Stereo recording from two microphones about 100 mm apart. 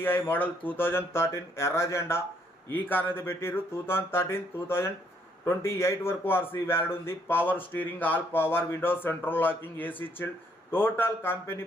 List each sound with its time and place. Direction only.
0.0 s a man's voice: 20° left (ahead or behind)